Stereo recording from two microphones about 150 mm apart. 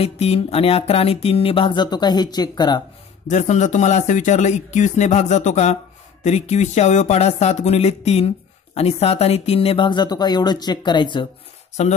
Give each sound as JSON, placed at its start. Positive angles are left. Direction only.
{"t": 0.0, "sound": "speech", "side_deg": 40}
{"t": 3.3, "sound": "speech", "side_deg": 50}
{"t": 11.8, "sound": "speech", "side_deg": 45}